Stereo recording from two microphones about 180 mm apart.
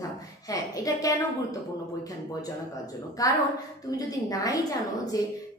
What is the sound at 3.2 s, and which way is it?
A woman's voice, 20° left (ahead or behind).